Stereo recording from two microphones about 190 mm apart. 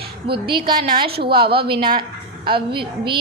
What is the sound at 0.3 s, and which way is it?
Speech, 25° right (ahead or behind).